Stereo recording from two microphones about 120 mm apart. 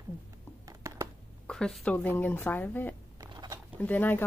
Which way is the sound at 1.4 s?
5° left (ahead or behind).